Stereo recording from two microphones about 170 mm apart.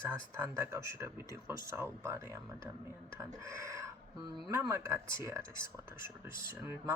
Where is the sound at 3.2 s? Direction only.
15° right (ahead or behind).